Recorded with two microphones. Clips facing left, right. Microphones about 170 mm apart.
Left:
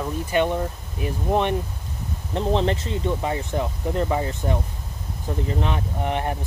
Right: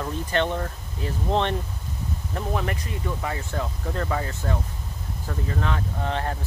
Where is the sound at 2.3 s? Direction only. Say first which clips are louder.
Left 7 dB; 25° left (ahead or behind).